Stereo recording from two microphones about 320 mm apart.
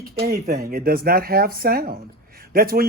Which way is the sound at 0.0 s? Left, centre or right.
Right.